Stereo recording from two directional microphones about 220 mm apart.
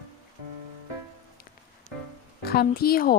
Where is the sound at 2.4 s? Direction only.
45° left (ahead or behind).